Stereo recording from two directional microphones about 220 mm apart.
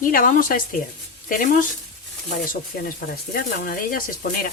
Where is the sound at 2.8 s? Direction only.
40° left (ahead or behind).